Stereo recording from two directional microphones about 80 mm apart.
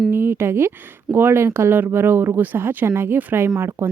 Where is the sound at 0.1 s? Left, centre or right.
Right.